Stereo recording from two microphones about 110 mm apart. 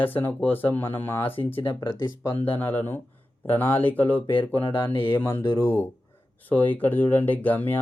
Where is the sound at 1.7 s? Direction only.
35° left (ahead or behind).